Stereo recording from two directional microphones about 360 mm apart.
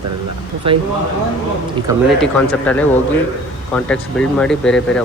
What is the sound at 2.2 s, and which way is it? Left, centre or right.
Speech, centre.